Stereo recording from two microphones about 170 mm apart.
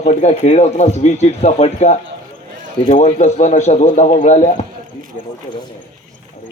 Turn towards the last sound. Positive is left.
turn(degrees=45)  # may be behind; listen again after turning